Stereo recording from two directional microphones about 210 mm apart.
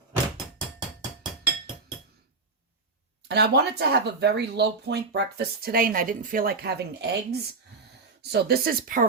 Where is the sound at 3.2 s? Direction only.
50° right (ahead or behind).